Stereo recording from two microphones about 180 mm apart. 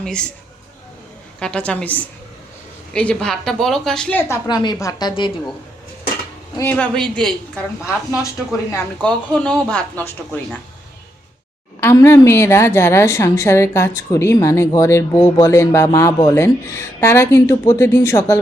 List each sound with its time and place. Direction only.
0.0 s a woman's voice: 5° left (ahead or behind)
1.4 s a woman's voice: 5° left (ahead or behind)
4.4 s a woman's voice: 25° left (ahead or behind)
6.6 s a woman's voice: 10° left (ahead or behind)
9.0 s a woman's voice: 5° left (ahead or behind)
11.8 s a woman's voice: 15° left (ahead or behind)